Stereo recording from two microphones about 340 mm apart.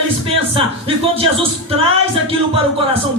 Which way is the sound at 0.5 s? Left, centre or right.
Centre.